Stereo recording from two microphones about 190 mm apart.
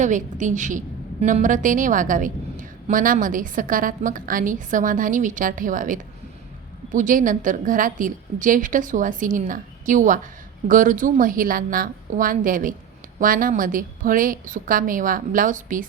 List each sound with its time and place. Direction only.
0.0 s a woman's voice: 40° right (ahead or behind)